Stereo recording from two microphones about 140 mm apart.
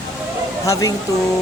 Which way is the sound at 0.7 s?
25° left (ahead or behind).